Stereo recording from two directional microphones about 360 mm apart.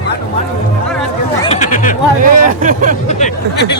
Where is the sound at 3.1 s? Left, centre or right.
Left.